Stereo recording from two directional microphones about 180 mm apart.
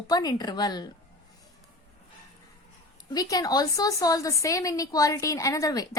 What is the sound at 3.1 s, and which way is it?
A woman's voice, 20° left (ahead or behind).